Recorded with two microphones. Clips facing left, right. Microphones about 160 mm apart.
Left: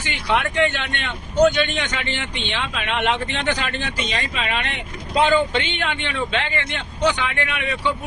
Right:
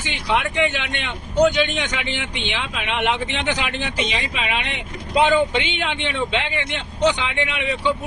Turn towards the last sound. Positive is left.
turn(degrees=-20)  # may be behind; listen again after turning